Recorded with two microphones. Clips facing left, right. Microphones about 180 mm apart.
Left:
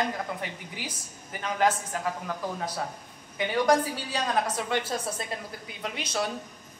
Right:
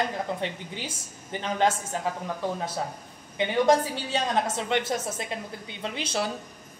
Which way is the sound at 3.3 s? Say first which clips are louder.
Right 2 dB; 25° right (ahead or behind).